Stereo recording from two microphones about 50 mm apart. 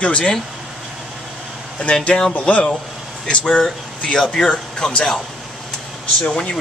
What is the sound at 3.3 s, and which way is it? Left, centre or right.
Speech, centre.